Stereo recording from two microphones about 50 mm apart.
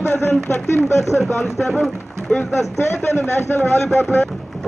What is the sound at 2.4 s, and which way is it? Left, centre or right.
Speech, left.